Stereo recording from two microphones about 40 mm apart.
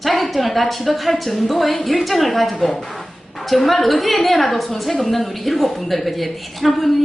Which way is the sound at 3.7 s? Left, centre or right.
Centre.